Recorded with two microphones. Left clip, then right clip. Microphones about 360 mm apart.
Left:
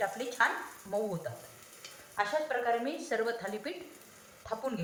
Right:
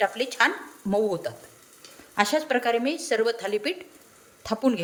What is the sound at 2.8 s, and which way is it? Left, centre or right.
Speech, right.